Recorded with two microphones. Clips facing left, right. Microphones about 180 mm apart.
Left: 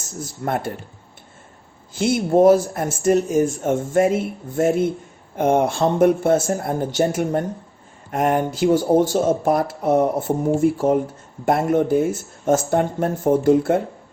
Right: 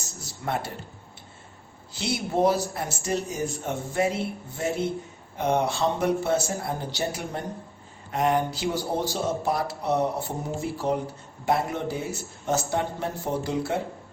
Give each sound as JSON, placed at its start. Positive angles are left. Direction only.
{"t": 0.0, "sound": "speech", "side_deg": 50}
{"t": 1.9, "sound": "speech", "side_deg": 50}